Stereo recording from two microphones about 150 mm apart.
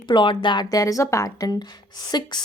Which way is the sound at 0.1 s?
30° left (ahead or behind).